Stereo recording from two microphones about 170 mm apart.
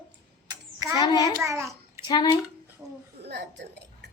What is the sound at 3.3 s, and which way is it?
Speech, 80° right.